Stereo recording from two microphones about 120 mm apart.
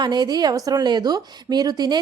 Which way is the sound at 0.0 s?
35° right (ahead or behind).